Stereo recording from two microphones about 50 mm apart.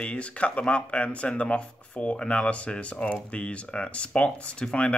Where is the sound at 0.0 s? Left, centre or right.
Left.